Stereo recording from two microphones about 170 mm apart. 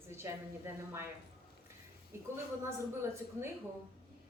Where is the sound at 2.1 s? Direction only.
15° right (ahead or behind).